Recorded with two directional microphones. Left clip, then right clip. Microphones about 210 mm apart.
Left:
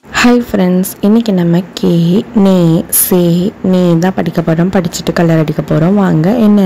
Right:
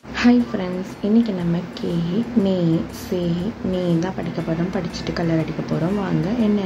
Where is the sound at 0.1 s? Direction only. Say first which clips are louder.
Left 9 dB; 50° left (ahead or behind).